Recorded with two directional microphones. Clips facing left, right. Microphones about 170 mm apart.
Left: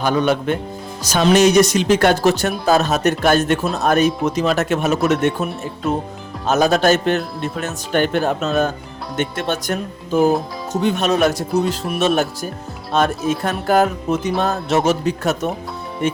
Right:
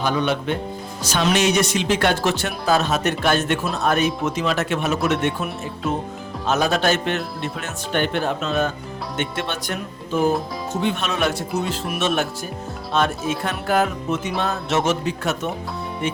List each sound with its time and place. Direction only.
0.0 s speech: 45° left (ahead or behind)